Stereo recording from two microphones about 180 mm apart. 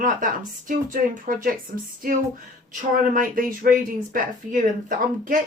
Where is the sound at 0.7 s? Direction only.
45° right (ahead or behind).